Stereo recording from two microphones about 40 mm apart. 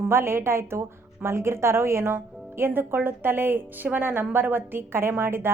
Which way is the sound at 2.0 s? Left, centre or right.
Right.